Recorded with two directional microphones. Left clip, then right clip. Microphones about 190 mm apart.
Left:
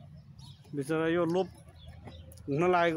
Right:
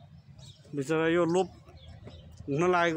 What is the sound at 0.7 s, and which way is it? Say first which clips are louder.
Speech: right 3 dB; 20° right (ahead or behind).